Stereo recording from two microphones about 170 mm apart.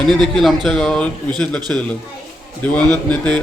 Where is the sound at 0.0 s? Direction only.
Centre (ahead or behind).